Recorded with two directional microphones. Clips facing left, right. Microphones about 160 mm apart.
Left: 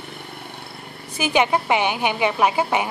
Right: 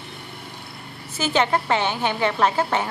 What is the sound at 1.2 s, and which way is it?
A woman's voice, 15° left (ahead or behind).